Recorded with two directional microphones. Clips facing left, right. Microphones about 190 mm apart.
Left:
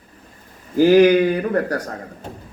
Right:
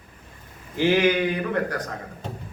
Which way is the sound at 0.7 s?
40° left (ahead or behind).